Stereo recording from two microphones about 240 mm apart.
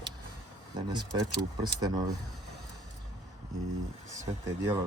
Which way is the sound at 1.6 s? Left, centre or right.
Centre.